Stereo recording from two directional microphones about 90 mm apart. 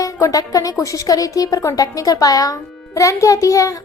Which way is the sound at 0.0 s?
40° left (ahead or behind).